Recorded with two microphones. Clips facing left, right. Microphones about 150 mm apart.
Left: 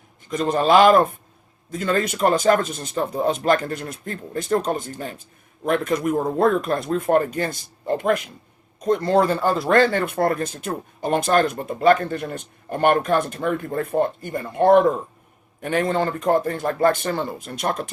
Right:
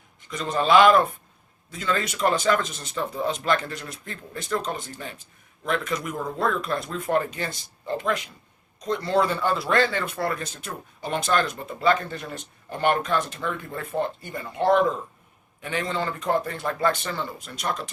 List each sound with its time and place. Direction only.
0.3 s a man's voice: 45° left (ahead or behind)